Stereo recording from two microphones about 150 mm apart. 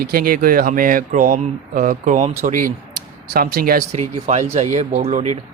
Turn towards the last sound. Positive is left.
turn(degrees=-50)  # may be behind; listen again after turning